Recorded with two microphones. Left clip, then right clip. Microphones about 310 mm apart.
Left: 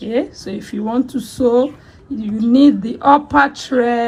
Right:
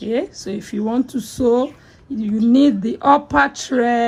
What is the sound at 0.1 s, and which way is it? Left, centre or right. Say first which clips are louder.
Speech: left 2 dB; right.